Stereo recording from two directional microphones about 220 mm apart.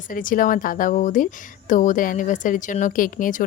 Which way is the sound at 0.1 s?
40° left (ahead or behind).